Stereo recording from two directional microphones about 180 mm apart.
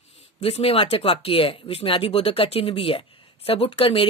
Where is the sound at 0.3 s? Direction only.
35° left (ahead or behind).